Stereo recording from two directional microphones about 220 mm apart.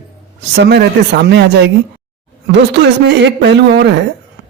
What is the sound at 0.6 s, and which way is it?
Speech, 50° right (ahead or behind).